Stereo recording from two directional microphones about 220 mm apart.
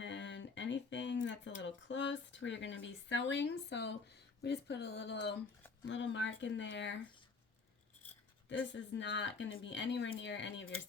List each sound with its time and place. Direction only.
0.0 s a sound: 55° left (ahead or behind)
4.4 s speech: 50° left (ahead or behind)
8.4 s speech: 55° left (ahead or behind)